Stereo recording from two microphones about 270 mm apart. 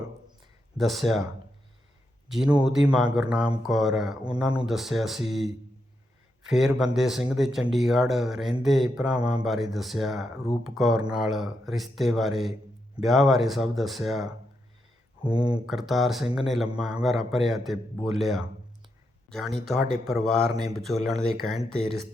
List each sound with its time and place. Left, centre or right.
0.8 s speech: centre
2.3 s speech: centre
6.5 s speech: centre
15.2 s speech: centre
15.6 s speech: centre